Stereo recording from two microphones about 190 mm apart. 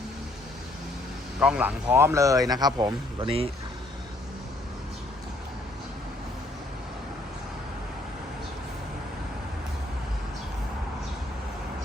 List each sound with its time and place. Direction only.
1.4 s speech: 5° right (ahead or behind); by 3.5 s 30° right (ahead or behind)